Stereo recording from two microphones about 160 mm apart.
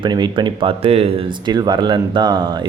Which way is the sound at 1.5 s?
25° right (ahead or behind).